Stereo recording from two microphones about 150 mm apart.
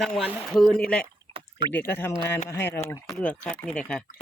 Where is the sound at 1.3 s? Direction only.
35° right (ahead or behind).